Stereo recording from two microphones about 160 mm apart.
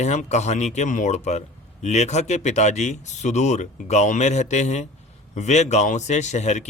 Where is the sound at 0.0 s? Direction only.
45° left (ahead or behind).